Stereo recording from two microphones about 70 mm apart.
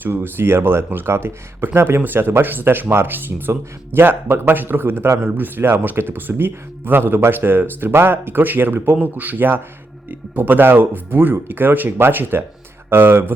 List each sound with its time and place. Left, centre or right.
0.0 s speech: right